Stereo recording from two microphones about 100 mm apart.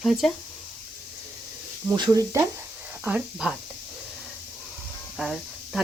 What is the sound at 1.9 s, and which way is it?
Speech, 50° right (ahead or behind).